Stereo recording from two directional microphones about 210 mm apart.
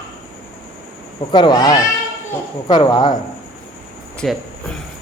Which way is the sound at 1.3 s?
20° left (ahead or behind).